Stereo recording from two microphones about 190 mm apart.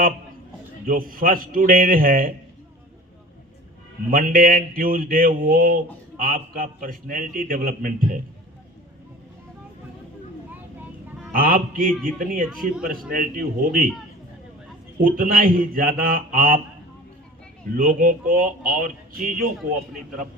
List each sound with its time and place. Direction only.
0.9 s speech: 45° right (ahead or behind)
4.1 s speech: 45° right (ahead or behind)
11.3 s speech: 45° right (ahead or behind)
12.5 s speech: centre (ahead or behind)
13.1 s speech: 45° right (ahead or behind)
15.0 s speech: 45° right (ahead or behind)
17.7 s speech: 45° right (ahead or behind)